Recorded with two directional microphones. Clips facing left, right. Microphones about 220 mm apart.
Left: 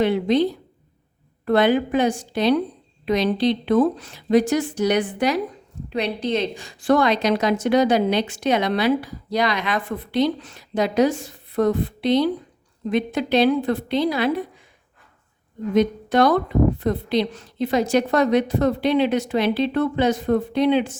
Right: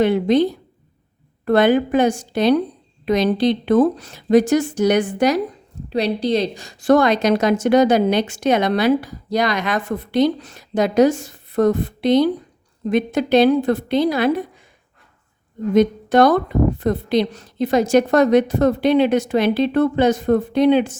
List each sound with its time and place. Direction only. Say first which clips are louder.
0.0 s a woman's voice: right 3 dB; 45° right (ahead or behind)
1.5 s a woman's voice: right 3 dB; 45° right (ahead or behind)
15.7 s a woman's voice: right 4 dB; 45° right (ahead or behind)